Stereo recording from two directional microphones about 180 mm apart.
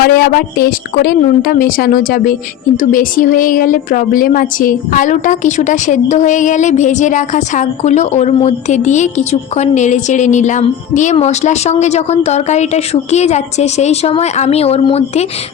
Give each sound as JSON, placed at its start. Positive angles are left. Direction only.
{"t": 0.0, "sound": "a woman's voice", "side_deg": 55}